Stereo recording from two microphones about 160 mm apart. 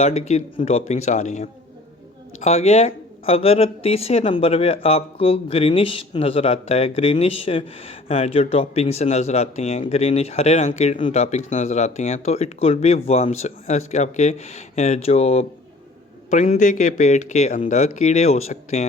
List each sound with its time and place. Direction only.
0.0 s speech: 40° left (ahead or behind)